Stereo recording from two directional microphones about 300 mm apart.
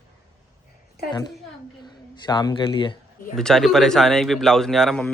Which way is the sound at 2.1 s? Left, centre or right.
Centre.